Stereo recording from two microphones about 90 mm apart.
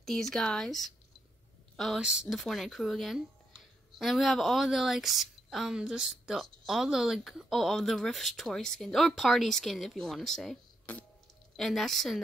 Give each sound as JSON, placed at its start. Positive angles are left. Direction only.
{"t": 0.0, "sound": "speech", "side_deg": 5}
{"t": 2.0, "sound": "speech", "side_deg": -10}
{"t": 10.9, "sound": "music", "side_deg": 20}
{"t": 11.5, "sound": "speech", "side_deg": 5}